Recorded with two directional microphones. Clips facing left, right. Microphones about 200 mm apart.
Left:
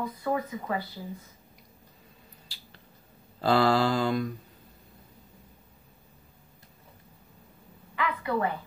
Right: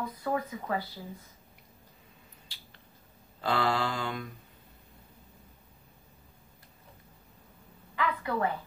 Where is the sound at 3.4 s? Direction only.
35° left (ahead or behind).